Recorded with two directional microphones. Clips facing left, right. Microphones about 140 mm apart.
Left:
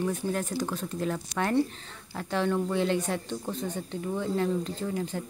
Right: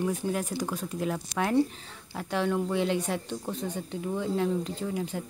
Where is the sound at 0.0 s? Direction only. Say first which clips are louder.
Even; 10° right (ahead or behind).